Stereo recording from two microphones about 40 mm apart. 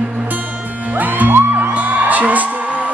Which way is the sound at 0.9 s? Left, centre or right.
Right.